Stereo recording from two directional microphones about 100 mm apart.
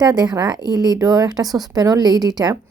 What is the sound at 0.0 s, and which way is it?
A woman's voice, 40° right (ahead or behind).